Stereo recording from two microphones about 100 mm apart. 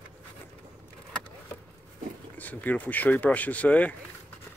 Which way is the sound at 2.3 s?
15° left (ahead or behind).